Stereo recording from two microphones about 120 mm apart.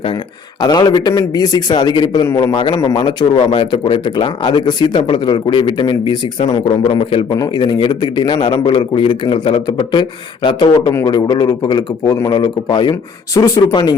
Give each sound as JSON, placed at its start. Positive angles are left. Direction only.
{"t": 0.6, "sound": "a man's voice", "side_deg": 35}
{"t": 2.5, "sound": "a man's voice", "side_deg": 40}
{"t": 7.3, "sound": "speech", "side_deg": 35}
{"t": 12.3, "sound": "speech", "side_deg": 40}